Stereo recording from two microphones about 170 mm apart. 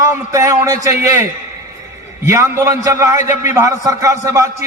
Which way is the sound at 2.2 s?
15° right (ahead or behind).